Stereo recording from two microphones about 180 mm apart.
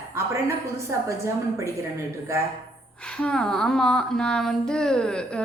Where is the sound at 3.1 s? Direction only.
5° left (ahead or behind).